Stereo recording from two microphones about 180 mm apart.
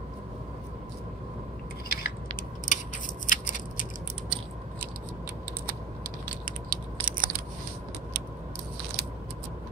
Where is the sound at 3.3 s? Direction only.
45° left (ahead or behind).